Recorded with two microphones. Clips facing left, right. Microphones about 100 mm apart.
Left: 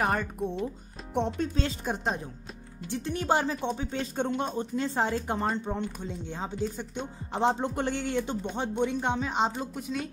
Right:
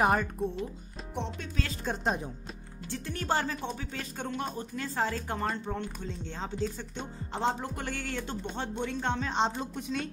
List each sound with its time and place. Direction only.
0.0 s speech: 5° right (ahead or behind)
1.1 s speech: 55° left (ahead or behind)
1.9 s speech: 15° left (ahead or behind)